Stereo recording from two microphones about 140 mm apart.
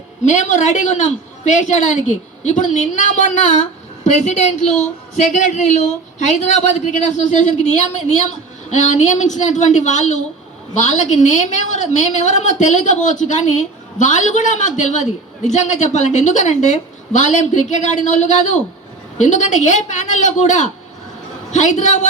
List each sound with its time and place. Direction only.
0.3 s a woman's voice: 60° left (ahead or behind)